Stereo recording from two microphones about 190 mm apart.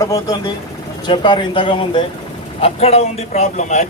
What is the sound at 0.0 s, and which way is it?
Speech, 20° left (ahead or behind).